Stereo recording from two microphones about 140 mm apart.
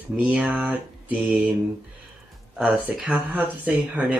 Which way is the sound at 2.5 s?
10° right (ahead or behind).